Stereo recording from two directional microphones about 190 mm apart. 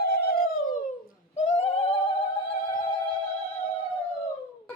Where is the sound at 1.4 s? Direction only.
35° left (ahead or behind).